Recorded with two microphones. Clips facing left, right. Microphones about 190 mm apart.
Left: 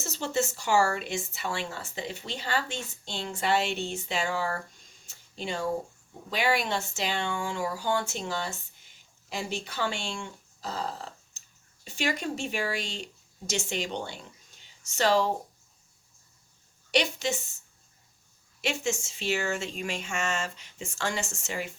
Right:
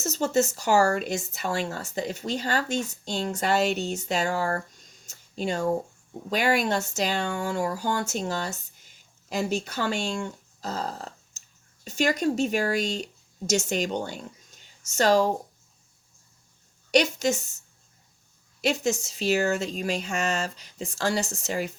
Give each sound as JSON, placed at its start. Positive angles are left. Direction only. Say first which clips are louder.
{"t": 0.0, "sound": "speech", "louder": "right 6 dB", "side_deg": -40}
{"t": 16.9, "sound": "speech", "louder": "right 5 dB", "side_deg": -45}
{"t": 18.6, "sound": "speech", "louder": "right 5 dB", "side_deg": -40}